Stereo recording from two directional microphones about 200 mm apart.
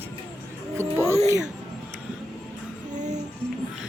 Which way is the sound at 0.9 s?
15° right (ahead or behind).